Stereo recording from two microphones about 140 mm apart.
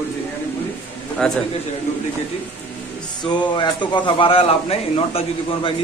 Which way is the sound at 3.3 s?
30° left (ahead or behind).